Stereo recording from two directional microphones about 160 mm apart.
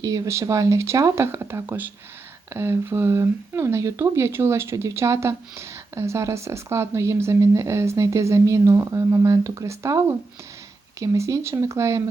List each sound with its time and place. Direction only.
0.0 s speech: 20° right (ahead or behind)